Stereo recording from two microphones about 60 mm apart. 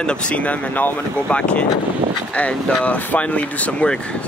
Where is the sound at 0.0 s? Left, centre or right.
Centre.